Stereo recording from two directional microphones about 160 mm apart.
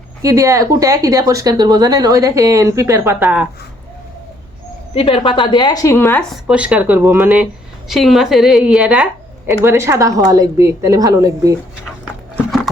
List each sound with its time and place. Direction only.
0.2 s speech: 20° right (ahead or behind)
4.9 s a woman's voice: 35° left (ahead or behind); by 6.2 s 15° left (ahead or behind)
6.3 s a woman's voice: 5° right (ahead or behind)
12.7 s a sound: centre (ahead or behind)